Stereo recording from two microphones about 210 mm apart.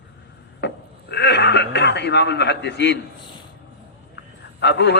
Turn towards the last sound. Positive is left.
turn(degrees=55)  # may be behind; listen again after turning